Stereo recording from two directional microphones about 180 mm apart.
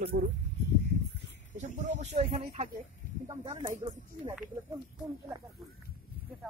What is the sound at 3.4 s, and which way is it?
Speech, 25° right (ahead or behind).